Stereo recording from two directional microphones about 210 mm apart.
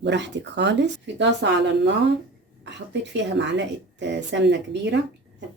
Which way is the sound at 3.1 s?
55° right (ahead or behind).